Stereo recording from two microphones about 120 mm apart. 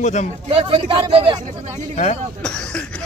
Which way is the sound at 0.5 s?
50° right (ahead or behind).